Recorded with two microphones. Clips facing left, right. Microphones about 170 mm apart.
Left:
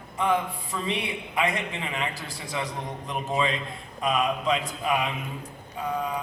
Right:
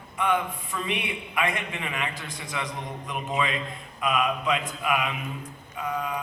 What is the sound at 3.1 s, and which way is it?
Mantra, 30° left (ahead or behind).